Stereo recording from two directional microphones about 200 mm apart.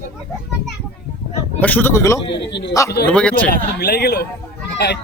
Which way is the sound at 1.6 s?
10° left (ahead or behind).